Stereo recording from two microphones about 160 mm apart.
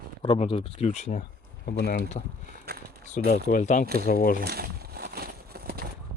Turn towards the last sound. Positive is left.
turn(degrees=-75)  # may be behind; listen again after turning